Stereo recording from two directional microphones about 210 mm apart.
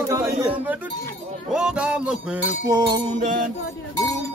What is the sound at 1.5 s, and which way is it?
Music, 5° right (ahead or behind).